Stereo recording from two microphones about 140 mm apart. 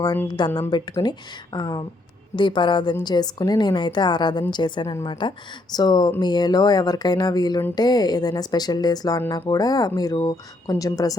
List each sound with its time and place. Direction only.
0.3 s a woman's voice: 30° left (ahead or behind)